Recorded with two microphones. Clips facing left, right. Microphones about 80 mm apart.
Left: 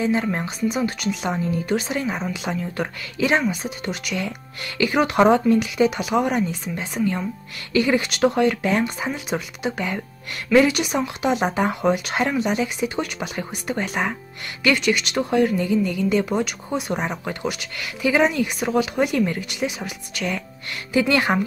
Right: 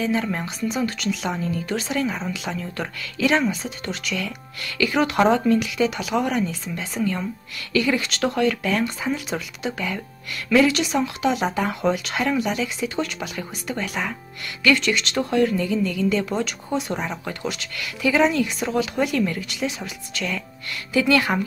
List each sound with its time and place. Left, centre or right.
0.0 s speech: left